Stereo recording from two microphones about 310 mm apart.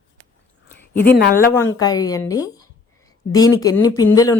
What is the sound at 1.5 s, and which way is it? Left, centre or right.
Speech, centre.